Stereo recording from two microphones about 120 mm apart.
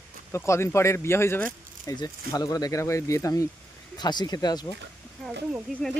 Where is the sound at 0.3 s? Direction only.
25° left (ahead or behind).